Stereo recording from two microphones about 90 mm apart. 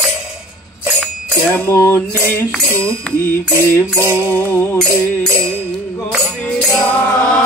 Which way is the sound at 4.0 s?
30° right (ahead or behind).